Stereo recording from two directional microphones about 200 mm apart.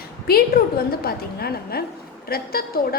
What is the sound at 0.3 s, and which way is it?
A woman's voice, 50° left (ahead or behind).